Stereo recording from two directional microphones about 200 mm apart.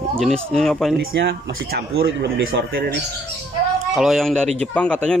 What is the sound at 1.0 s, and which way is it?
Speech, 50° right (ahead or behind).